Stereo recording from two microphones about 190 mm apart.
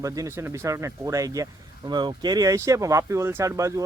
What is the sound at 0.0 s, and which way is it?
Speech, 15° right (ahead or behind).